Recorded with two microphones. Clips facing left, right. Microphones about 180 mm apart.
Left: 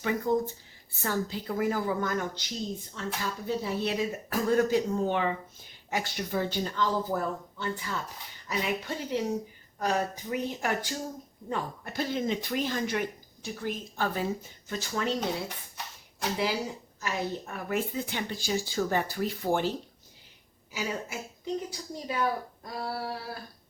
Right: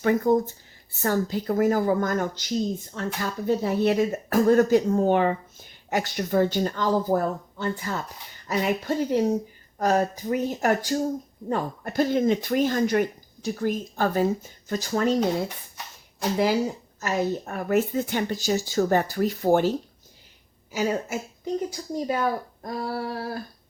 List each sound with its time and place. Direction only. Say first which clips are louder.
0.0 s speech: right 7 dB; 50° right (ahead or behind)
17.0 s speech: right 7 dB; 45° right (ahead or behind)
20.7 s speech: right 8 dB; 45° right (ahead or behind)